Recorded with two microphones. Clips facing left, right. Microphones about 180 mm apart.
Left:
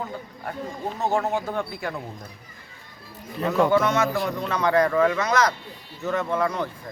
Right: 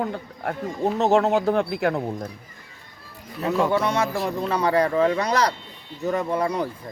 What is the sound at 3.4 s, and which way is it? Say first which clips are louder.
Speech: left 1 dB; 5° right (ahead or behind).